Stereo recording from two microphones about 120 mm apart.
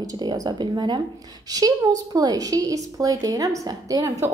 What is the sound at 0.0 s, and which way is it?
A woman's voice, 30° right (ahead or behind).